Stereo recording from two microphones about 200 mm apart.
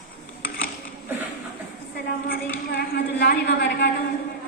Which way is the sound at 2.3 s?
50° left (ahead or behind).